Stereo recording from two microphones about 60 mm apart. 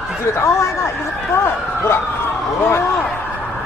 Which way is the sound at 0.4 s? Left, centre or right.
Left.